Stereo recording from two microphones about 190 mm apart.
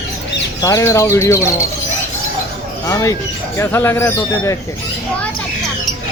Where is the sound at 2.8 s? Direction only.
15° left (ahead or behind).